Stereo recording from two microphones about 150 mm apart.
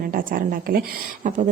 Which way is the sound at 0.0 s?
65° right (ahead or behind).